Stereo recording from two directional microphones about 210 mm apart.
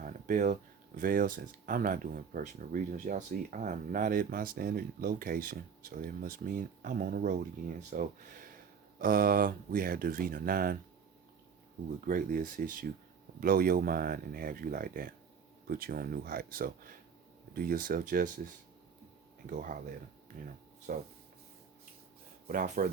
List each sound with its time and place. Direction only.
0.0 s a sound: 40° right (ahead or behind)
0.9 s speech: 40° right (ahead or behind)
11.9 s speech: 40° right (ahead or behind)
19.5 s speech: 40° right (ahead or behind)
22.4 s speech: 40° right (ahead or behind)